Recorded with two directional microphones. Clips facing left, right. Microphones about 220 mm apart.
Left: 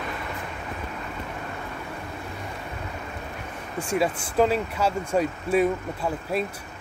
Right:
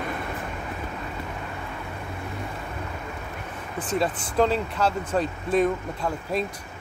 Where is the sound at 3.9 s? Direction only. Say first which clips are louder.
Left 1 dB; 5° left (ahead or behind).